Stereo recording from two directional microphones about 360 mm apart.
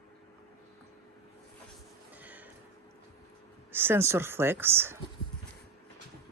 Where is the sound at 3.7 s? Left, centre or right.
Centre.